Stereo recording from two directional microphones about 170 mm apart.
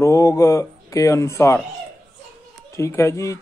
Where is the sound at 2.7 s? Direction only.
15° left (ahead or behind).